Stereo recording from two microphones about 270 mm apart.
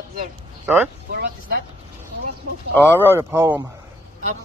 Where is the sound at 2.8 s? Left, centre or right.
Centre.